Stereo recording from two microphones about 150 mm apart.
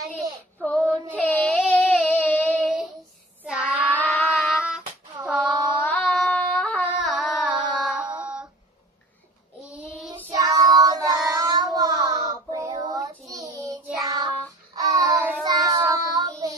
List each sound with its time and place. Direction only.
0.6 s child singing: centre (ahead or behind)
1.8 s a sound: 5° left (ahead or behind)
3.4 s child singing: 5° right (ahead or behind)
3.9 s a sound: 10° left (ahead or behind)
4.5 s child singing: 5° right (ahead or behind)
5.9 s a sound: centre (ahead or behind)
10.3 s child singing: 20° right (ahead or behind)
11.2 s music: 25° right (ahead or behind)
12.3 s child singing: 25° right (ahead or behind)